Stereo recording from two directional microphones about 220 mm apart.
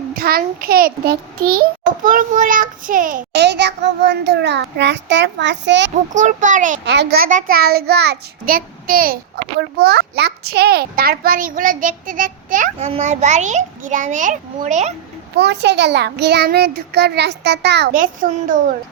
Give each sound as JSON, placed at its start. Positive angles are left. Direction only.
{"t": 0.1, "sound": "a child's voice", "side_deg": -40}
{"t": 6.1, "sound": "a child's voice", "side_deg": -35}
{"t": 6.8, "sound": "a child's voice", "side_deg": -50}
{"t": 15.4, "sound": "a child's voice", "side_deg": -50}